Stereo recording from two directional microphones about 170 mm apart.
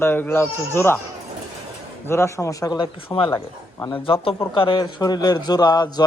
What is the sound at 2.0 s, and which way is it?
Speech, 15° left (ahead or behind).